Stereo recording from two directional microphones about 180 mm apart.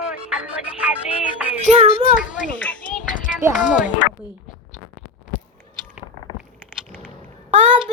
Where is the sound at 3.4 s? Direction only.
10° right (ahead or behind).